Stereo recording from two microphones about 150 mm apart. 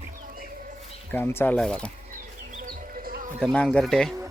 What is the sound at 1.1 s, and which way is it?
Speech, 15° left (ahead or behind).